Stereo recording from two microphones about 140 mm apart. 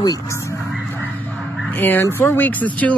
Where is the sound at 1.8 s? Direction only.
15° left (ahead or behind).